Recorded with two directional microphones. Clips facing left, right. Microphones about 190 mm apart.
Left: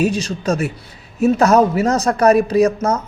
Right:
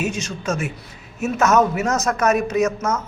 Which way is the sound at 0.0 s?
35° left (ahead or behind).